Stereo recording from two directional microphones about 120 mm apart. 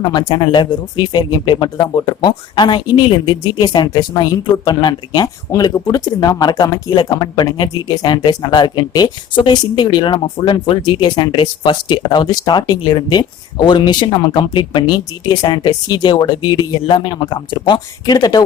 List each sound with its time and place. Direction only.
0.0 s speech: 35° left (ahead or behind)